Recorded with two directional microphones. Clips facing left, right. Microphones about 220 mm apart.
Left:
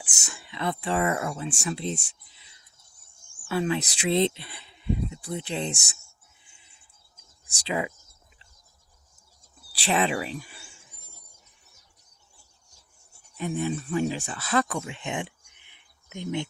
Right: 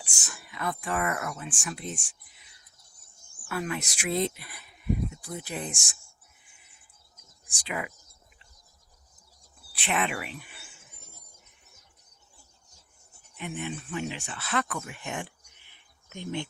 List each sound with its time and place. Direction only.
0.1 s speech: 25° left (ahead or behind)
3.4 s speech: 25° left (ahead or behind)
6.4 s a sound: 30° left (ahead or behind)
9.8 s speech: 30° left (ahead or behind)
13.3 s speech: 35° left (ahead or behind); by 16.5 s 15° left (ahead or behind)